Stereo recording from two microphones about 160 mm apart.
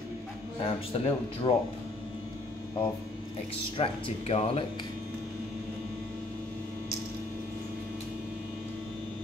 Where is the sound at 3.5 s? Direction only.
35° left (ahead or behind).